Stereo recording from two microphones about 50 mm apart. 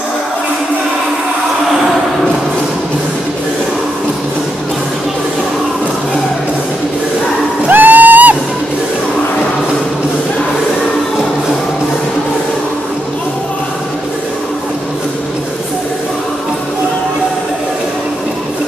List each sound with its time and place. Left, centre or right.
7.6 s music: right